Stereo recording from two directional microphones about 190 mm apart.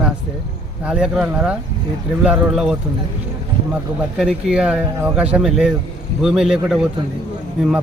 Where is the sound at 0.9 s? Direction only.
5° right (ahead or behind).